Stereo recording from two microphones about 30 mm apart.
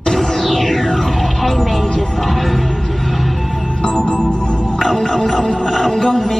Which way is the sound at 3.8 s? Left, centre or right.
Left.